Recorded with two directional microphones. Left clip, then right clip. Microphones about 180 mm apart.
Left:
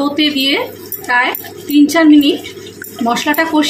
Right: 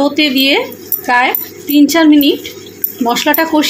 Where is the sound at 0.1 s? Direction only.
40° right (ahead or behind).